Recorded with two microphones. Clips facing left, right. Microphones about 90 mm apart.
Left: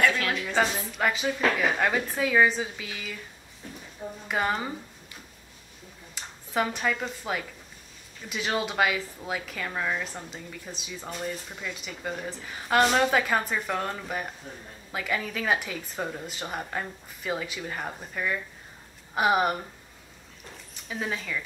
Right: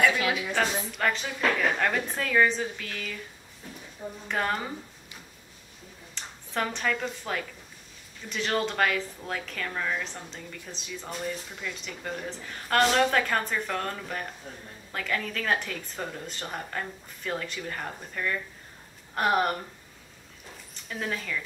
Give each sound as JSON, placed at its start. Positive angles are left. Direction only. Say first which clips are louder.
{"t": 0.1, "sound": "a sound", "louder": "right 1 dB", "side_deg": -10}
{"t": 0.6, "sound": "a woman's voice", "louder": "left 2 dB", "side_deg": 5}
{"t": 4.3, "sound": "a woman's voice", "louder": "left 1 dB", "side_deg": 5}
{"t": 6.1, "sound": "a woman's voice", "louder": "left 3 dB", "side_deg": 5}
{"t": 20.7, "sound": "speech", "louder": "left 1 dB", "side_deg": 5}